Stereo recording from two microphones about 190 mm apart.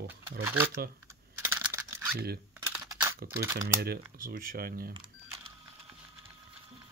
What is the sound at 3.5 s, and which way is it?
Speech, 50° right (ahead or behind).